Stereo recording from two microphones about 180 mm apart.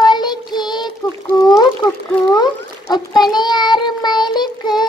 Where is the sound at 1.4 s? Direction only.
25° left (ahead or behind).